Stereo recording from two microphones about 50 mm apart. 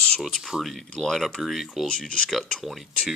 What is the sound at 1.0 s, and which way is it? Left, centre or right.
Speech, centre.